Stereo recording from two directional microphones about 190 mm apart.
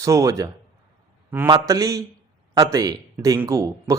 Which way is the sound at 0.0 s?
15° right (ahead or behind).